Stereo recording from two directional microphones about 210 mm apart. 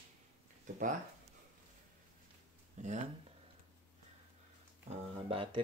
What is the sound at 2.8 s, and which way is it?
Speech, 35° right (ahead or behind).